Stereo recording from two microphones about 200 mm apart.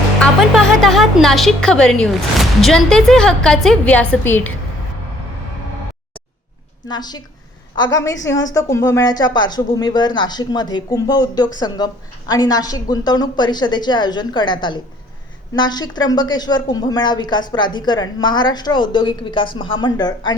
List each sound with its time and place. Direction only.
0.2 s a woman's voice: centre (ahead or behind)
6.8 s a woman's voice: 20° left (ahead or behind)